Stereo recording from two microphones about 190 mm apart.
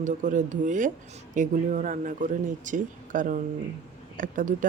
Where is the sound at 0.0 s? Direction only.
40° right (ahead or behind).